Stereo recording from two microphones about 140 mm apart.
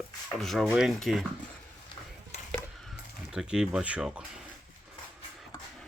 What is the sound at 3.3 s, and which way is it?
Speech, 5° right (ahead or behind).